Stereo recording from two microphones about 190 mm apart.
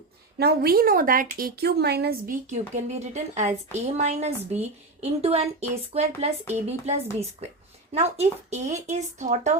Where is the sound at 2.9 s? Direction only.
35° right (ahead or behind).